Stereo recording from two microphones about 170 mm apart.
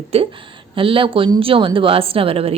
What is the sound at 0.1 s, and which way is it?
A woman's voice, 35° right (ahead or behind).